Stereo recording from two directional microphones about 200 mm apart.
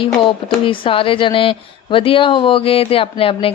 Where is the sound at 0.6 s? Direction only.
25° left (ahead or behind).